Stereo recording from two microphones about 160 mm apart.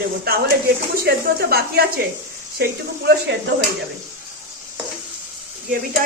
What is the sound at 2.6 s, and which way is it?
Speech, 90° right.